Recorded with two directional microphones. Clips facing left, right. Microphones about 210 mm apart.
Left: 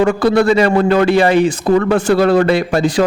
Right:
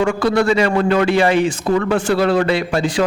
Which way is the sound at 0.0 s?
35° left (ahead or behind).